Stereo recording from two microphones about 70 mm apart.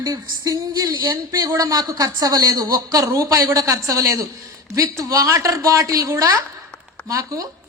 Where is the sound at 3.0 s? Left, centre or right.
Right.